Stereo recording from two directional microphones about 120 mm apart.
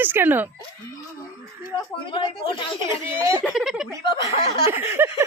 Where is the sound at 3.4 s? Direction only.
5° right (ahead or behind).